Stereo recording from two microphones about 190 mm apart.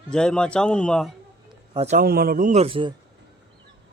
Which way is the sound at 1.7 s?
35° right (ahead or behind).